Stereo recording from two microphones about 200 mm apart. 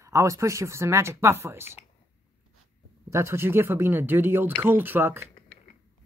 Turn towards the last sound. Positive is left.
turn(degrees=-10)  # may be behind; listen again after turning